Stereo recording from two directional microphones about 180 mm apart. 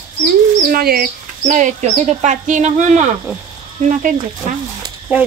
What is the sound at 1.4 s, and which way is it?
Speech, 40° right (ahead or behind).